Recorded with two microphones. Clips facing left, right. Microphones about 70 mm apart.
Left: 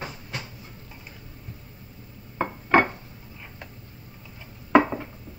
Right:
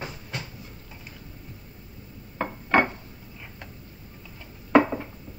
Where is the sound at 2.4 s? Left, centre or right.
Centre.